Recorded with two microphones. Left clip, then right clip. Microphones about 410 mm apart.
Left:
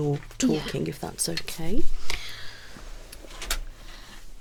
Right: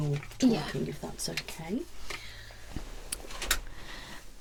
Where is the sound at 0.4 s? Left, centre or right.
Left.